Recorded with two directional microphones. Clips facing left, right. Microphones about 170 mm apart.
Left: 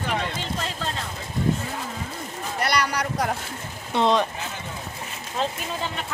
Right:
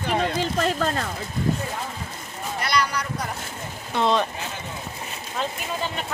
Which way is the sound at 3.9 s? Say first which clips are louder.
Left 1 dB; 20° left (ahead or behind).